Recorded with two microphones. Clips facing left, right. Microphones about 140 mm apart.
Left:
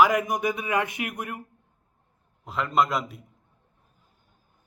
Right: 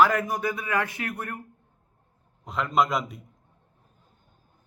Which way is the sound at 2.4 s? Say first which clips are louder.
Even; centre (ahead or behind).